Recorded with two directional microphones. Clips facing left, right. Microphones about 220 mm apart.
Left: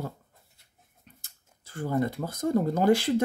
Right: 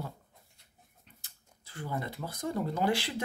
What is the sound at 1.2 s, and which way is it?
Speech, 45° left (ahead or behind).